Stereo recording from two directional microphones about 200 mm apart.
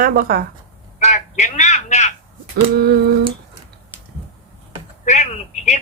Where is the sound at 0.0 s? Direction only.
45° right (ahead or behind).